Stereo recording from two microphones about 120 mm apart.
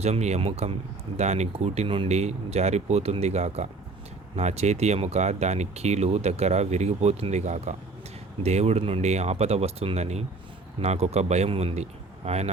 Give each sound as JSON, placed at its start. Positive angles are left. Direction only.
{"t": 0.0, "sound": "speech", "side_deg": -65}
{"t": 8.4, "sound": "speech", "side_deg": -60}